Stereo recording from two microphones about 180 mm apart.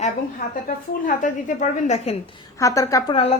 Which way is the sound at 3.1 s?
35° left (ahead or behind).